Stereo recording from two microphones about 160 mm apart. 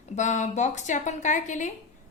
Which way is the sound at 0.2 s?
50° left (ahead or behind).